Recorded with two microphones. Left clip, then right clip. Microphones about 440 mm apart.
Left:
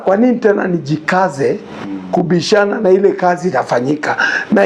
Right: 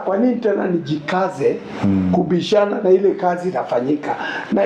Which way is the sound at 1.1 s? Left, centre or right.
Left.